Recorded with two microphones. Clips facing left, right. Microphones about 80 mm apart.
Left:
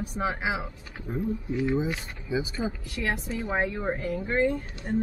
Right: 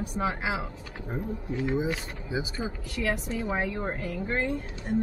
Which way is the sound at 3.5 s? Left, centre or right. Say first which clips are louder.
Left 3 dB; centre.